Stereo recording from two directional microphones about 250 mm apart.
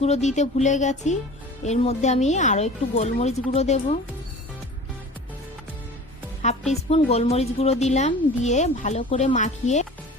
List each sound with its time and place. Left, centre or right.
0.0 s a woman's voice: left
6.4 s a woman's voice: left